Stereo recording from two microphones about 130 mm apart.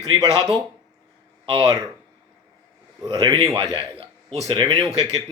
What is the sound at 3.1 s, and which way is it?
Speech, 35° right (ahead or behind).